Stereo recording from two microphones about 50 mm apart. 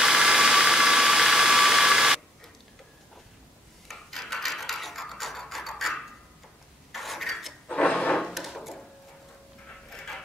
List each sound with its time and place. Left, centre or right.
0.0 s engine: centre
3.8 s filing: centre
7.6 s drawer open or close: left
8.2 s a sound: centre
9.8 s pant: centre